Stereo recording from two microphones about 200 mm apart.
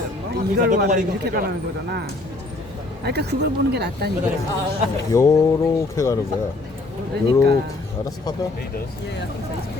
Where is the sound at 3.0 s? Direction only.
55° right (ahead or behind).